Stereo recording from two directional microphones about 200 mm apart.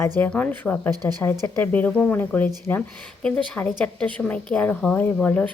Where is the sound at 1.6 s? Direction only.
10° left (ahead or behind).